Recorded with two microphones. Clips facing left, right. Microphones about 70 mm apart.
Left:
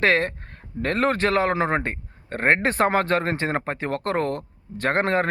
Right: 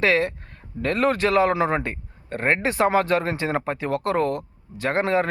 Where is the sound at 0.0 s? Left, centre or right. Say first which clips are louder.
Even; left.